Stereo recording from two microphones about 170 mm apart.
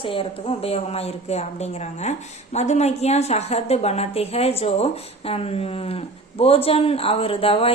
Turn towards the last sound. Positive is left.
turn(degrees=35)  # may be behind; listen again after turning